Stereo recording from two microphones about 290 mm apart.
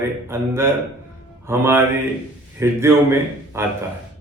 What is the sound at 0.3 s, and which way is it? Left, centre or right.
A man's voice, centre.